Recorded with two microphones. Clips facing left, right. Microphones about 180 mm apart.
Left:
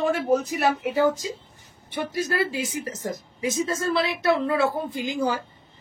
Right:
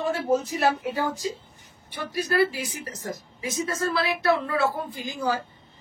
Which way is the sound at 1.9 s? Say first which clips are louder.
Left 1 dB; 20° left (ahead or behind).